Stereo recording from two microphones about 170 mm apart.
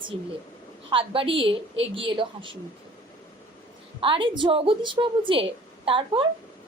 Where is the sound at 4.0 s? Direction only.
30° right (ahead or behind).